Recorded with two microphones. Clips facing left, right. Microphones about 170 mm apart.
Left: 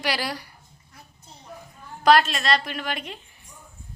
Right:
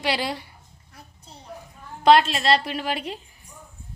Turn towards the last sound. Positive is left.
turn(degrees=-30)  # may be behind; listen again after turning